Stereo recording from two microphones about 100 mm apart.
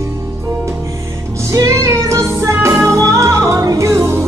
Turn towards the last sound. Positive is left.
turn(degrees=-30)  # may be behind; listen again after turning